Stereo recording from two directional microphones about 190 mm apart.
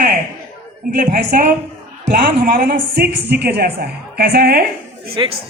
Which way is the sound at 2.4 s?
50° right (ahead or behind).